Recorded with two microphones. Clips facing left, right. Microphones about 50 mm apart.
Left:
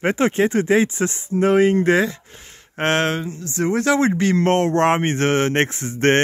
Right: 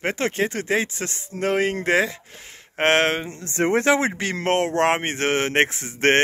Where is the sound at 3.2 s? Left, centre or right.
Right.